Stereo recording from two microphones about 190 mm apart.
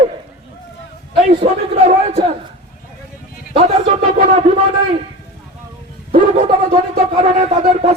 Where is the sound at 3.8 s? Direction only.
35° right (ahead or behind).